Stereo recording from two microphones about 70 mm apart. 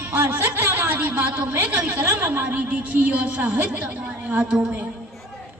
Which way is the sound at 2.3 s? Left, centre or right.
Right.